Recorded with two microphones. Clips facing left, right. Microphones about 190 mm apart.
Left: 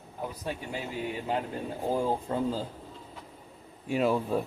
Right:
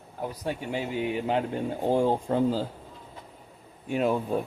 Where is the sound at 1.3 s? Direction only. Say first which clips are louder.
Right 5 dB; 25° right (ahead or behind).